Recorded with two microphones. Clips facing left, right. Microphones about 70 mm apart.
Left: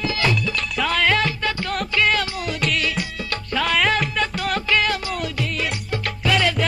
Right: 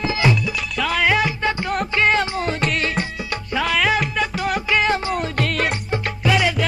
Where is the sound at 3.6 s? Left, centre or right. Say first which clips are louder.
Right 1 dB; centre; by 5.1 s right.